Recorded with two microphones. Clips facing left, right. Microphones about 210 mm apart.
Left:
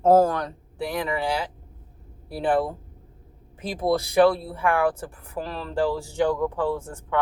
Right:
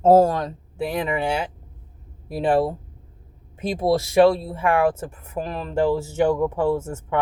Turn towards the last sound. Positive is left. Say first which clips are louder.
# right 6 dB
turn(degrees=-25)  # may be behind; listen again after turning